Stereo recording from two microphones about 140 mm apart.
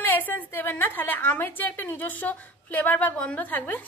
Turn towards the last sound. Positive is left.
turn(degrees=15)  # may be behind; listen again after turning